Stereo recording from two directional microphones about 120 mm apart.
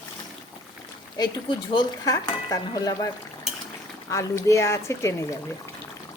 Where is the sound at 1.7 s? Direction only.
30° left (ahead or behind).